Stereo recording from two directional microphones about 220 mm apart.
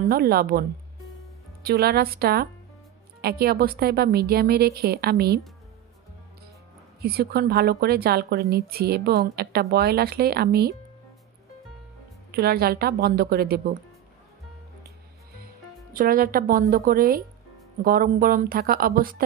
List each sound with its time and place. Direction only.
0.1 s a woman's voice: 45° right (ahead or behind)
7.0 s a woman's voice: 45° right (ahead or behind)
12.3 s a woman's voice: 45° right (ahead or behind)
15.3 s speech: 40° right (ahead or behind)